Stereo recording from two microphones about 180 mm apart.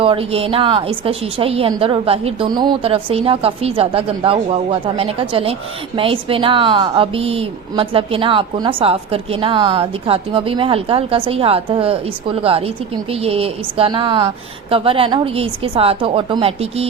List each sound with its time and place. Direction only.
0.0 s a woman's voice: 30° right (ahead or behind)